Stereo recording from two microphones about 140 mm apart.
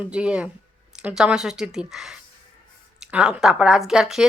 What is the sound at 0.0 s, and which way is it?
Speech, 10° right (ahead or behind).